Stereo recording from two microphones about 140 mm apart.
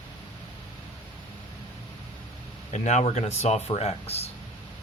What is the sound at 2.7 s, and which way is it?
A man's voice, 55° left (ahead or behind).